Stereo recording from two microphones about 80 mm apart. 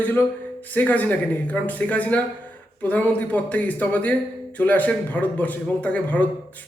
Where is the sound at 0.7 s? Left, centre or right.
Left.